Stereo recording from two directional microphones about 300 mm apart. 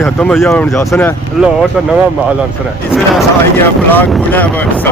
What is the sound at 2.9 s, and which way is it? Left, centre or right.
Speech, centre.